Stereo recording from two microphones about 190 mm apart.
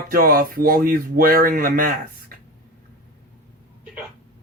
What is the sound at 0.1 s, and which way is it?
Speech, 50° right (ahead or behind).